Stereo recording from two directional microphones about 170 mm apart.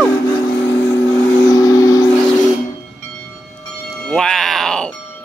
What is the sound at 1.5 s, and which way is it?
Vehicle, 20° left (ahead or behind).